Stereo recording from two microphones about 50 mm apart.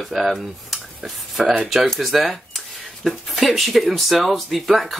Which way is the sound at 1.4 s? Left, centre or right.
Centre.